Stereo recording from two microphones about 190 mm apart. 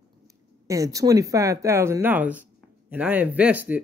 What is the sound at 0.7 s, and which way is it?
Speech, 15° right (ahead or behind).